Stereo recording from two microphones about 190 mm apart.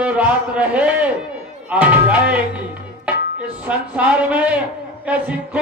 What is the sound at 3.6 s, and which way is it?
A man's voice, 5° right (ahead or behind).